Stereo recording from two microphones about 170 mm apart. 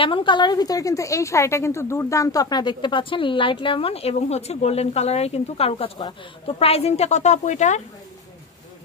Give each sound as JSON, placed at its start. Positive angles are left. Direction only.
{"t": 0.0, "sound": "a woman's voice", "side_deg": 30}